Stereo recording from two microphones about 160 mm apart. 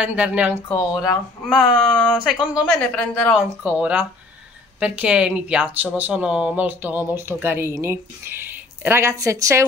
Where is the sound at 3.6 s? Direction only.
10° right (ahead or behind).